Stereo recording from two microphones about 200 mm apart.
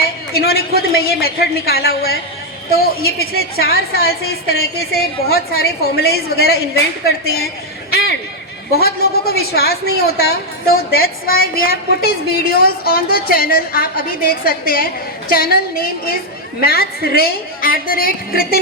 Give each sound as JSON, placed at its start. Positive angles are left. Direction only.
{"t": 0.3, "sound": "a woman's voice", "side_deg": 50}
{"t": 3.2, "sound": "a woman's voice", "side_deg": 50}
{"t": 7.3, "sound": "a sound", "side_deg": 50}
{"t": 8.7, "sound": "a woman's voice", "side_deg": 50}